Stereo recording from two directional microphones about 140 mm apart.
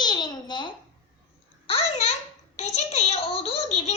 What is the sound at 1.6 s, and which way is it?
Speech, 50° left (ahead or behind).